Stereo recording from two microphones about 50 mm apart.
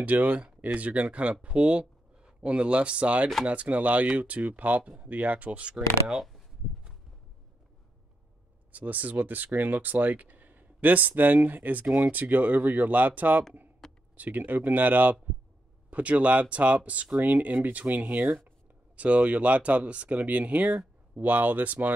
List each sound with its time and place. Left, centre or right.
0.0 s speech: right; by 6.2 s centre
8.7 s speech: right